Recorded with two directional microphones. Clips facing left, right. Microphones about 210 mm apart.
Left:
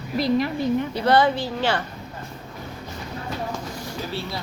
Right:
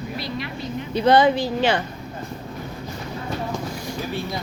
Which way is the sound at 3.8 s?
15° right (ahead or behind).